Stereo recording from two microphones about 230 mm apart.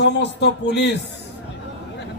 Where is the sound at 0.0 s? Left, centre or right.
Left.